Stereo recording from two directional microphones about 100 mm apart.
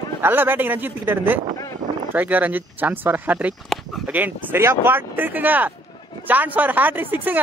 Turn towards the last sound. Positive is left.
turn(degrees=-20)  # may be behind; listen again after turning